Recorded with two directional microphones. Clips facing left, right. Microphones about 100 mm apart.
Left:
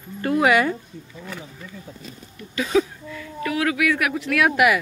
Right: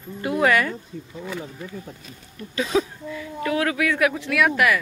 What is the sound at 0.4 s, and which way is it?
Speech, 20° left (ahead or behind).